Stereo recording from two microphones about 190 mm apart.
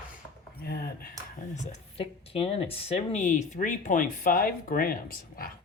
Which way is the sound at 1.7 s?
30° left (ahead or behind).